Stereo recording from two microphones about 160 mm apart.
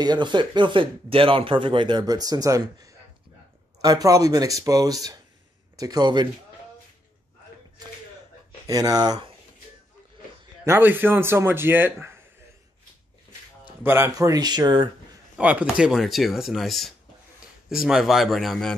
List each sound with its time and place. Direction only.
0.0 s speech: 25° right (ahead or behind)
8.6 s speech: 25° right (ahead or behind)
10.6 s a man's voice: 15° right (ahead or behind)
13.8 s speech: 15° right (ahead or behind)
15.3 s speech: 5° right (ahead or behind)